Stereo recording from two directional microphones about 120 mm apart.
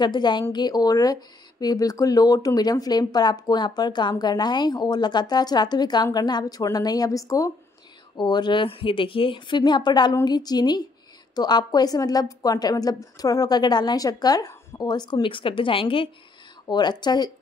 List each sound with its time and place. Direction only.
0.0 s speech: 40° left (ahead or behind)
8.2 s speech: 40° left (ahead or behind)
16.6 s speech: 35° left (ahead or behind)